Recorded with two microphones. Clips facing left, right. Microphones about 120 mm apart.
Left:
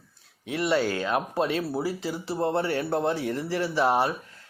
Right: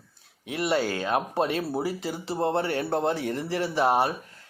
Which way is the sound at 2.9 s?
25° right (ahead or behind).